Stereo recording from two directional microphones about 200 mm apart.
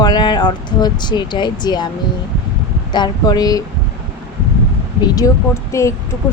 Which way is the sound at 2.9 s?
20° left (ahead or behind).